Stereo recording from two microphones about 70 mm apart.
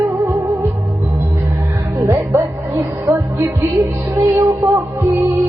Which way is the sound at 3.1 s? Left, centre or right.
Right.